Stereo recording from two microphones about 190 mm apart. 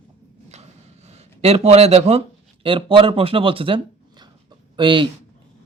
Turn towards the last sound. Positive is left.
turn(degrees=-25)  # may be behind; listen again after turning